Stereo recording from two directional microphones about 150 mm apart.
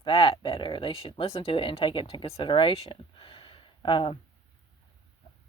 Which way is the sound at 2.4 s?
35° left (ahead or behind).